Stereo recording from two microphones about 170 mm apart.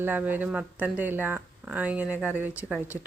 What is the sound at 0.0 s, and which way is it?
Speech, 10° right (ahead or behind).